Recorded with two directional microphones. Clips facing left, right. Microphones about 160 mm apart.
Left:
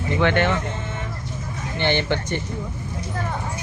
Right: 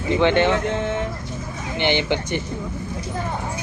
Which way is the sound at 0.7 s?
70° right (ahead or behind).